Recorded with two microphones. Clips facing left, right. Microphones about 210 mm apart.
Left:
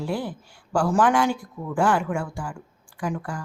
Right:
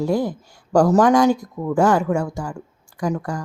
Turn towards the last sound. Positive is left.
turn(degrees=-40)  # may be behind; listen again after turning